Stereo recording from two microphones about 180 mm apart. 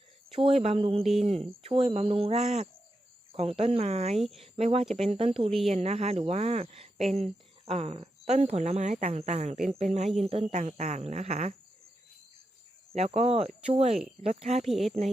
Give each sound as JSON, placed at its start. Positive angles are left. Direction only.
{"t": 0.3, "sound": "speech", "side_deg": -30}
{"t": 12.9, "sound": "speech", "side_deg": -35}
{"t": 14.7, "sound": "speech", "side_deg": 0}